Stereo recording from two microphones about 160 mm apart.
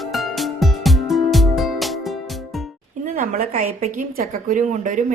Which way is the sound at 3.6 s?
55° right (ahead or behind).